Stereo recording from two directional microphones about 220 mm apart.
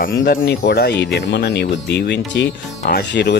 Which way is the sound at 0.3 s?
45° left (ahead or behind).